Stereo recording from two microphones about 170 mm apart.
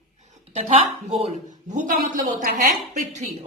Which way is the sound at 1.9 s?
50° right (ahead or behind).